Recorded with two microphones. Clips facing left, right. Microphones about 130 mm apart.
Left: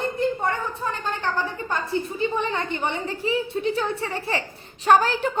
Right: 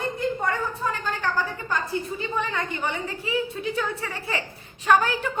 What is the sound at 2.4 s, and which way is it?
A woman's voice, 25° left (ahead or behind).